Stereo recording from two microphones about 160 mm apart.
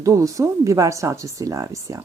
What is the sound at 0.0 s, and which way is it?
Speech, 20° right (ahead or behind).